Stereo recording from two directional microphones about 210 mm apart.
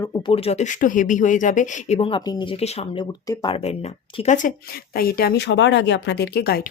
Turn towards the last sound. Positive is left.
turn(degrees=45)  # may be behind; listen again after turning